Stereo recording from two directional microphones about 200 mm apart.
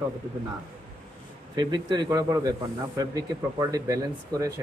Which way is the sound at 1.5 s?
20° right (ahead or behind).